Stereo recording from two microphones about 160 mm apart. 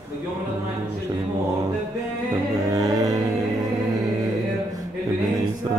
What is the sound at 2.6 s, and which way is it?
Music, 20° right (ahead or behind).